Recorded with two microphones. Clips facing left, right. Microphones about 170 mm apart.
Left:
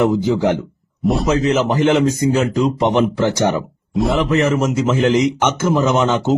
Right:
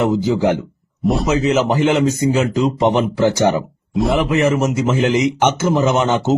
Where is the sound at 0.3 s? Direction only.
10° right (ahead or behind).